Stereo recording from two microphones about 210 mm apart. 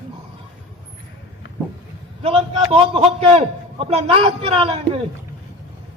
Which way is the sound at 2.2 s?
30° right (ahead or behind).